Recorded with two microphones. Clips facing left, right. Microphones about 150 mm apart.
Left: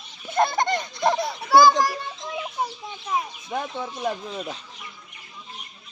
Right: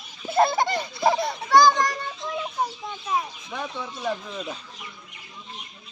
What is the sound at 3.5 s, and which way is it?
Bird, 45° left (ahead or behind).